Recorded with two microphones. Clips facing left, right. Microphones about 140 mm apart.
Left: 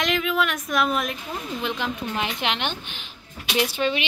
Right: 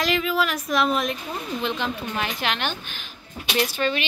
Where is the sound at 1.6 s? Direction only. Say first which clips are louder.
Right 1 dB; 15° left (ahead or behind).